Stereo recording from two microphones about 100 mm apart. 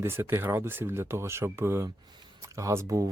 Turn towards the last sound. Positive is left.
turn(degrees=-30)  # may be behind; listen again after turning